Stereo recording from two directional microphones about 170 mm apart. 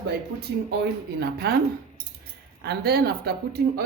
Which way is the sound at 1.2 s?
70° right (ahead or behind).